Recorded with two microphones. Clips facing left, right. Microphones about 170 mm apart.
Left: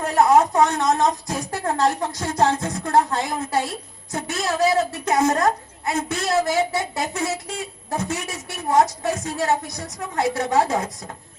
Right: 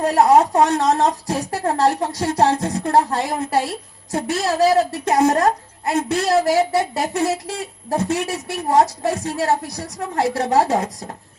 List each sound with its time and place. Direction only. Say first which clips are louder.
0.0 s a woman's voice: right 2 dB; 35° right (ahead or behind)